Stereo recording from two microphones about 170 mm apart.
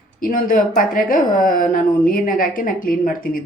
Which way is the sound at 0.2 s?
50° left (ahead or behind).